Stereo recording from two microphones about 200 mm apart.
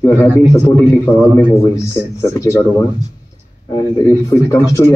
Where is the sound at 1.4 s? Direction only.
15° left (ahead or behind).